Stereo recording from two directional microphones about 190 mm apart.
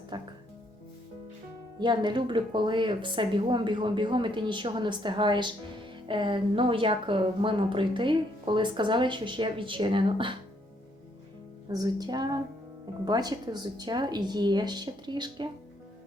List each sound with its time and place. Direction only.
0.1 s music: 20° right (ahead or behind)
1.8 s speech: 25° right (ahead or behind)
11.7 s speech: 20° right (ahead or behind)